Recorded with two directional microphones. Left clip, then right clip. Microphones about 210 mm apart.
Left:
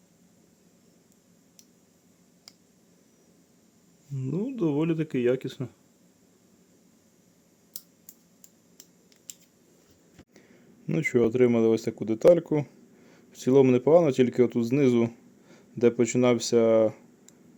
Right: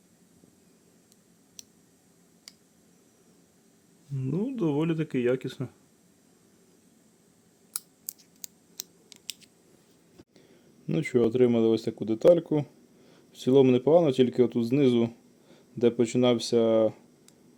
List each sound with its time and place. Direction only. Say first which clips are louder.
4.2 s speech: left 1 dB; centre (ahead or behind)
8.8 s scissors: right 13 dB; 15° right (ahead or behind)
10.8 s speech: left 1 dB; 5° left (ahead or behind)